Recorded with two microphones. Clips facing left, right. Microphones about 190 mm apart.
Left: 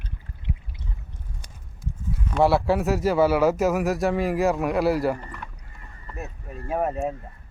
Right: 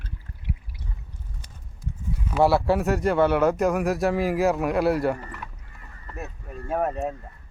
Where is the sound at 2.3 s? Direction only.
Centre (ahead or behind).